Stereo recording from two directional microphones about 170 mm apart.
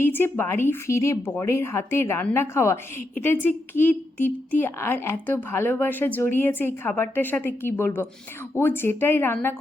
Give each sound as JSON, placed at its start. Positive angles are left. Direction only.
{"t": 0.0, "sound": "speech", "side_deg": 10}